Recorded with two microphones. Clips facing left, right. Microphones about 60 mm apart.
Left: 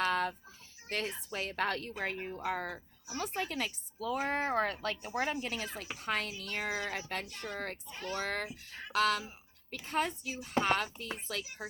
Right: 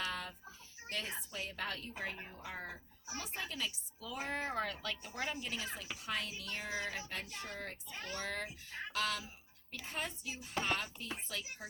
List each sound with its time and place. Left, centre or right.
0.0 s a sound: left
0.9 s speech: left
2.1 s speech: left
2.4 s speech: left
3.2 s speech: left